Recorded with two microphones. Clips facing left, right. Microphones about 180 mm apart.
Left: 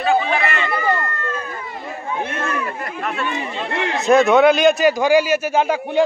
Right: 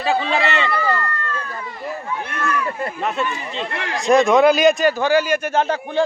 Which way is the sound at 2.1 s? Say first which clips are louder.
Left 2 dB; 25° left (ahead or behind).